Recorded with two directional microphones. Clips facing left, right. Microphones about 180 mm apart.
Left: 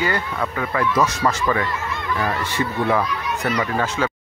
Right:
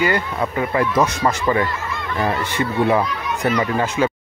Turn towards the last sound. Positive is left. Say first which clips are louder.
# right 3 dB
turn(degrees=-15)  # may be behind; listen again after turning